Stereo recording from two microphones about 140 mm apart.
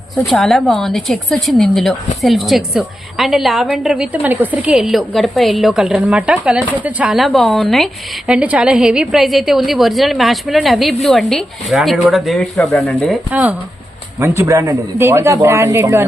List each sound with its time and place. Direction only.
0.3 s a woman's voice: centre (ahead or behind)
8.3 s a woman's voice: 10° right (ahead or behind)
13.3 s a man's voice: 10° right (ahead or behind)